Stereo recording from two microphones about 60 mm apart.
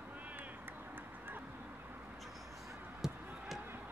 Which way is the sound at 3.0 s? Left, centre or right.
Centre.